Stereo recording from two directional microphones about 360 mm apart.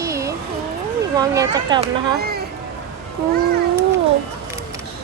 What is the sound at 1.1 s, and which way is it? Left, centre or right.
Speech, centre.